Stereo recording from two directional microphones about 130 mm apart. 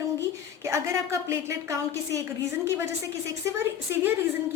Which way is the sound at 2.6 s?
20° right (ahead or behind).